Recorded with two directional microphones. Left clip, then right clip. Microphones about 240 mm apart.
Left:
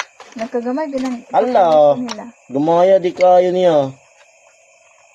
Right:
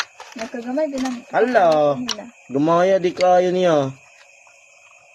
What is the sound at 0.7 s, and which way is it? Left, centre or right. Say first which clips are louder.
Speech: left 2 dB; left.